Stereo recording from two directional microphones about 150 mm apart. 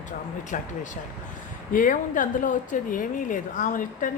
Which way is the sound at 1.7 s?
60° left (ahead or behind).